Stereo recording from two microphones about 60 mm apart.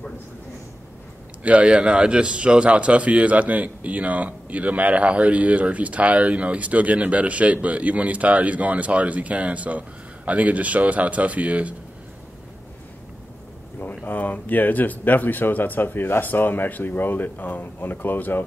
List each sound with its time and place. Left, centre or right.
1.4 s a man's voice: right
13.7 s speech: left